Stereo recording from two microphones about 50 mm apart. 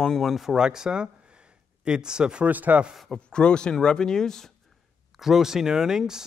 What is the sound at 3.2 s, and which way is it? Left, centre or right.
Speech, centre.